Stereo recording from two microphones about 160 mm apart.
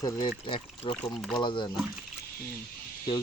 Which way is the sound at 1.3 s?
30° left (ahead or behind).